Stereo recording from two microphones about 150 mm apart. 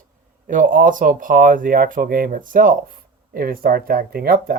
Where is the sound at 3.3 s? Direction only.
80° right.